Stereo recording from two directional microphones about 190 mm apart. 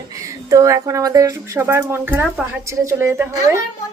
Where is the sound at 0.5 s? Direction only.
15° right (ahead or behind).